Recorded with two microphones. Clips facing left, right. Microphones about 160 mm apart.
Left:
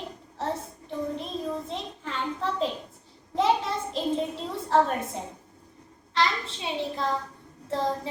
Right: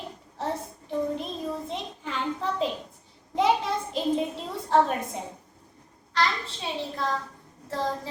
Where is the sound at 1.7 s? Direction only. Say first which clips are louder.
Right 1 dB; centre (ahead or behind).